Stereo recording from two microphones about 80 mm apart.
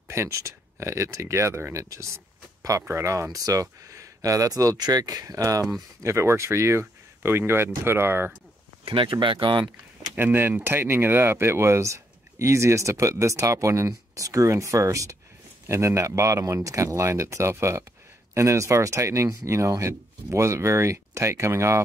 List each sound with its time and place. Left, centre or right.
0.1 s speech: right
6.0 s speech: right
8.9 s speech: right
10.1 s speech: right